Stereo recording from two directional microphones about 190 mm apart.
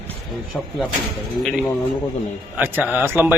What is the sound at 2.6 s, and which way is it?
Speech, 10° right (ahead or behind).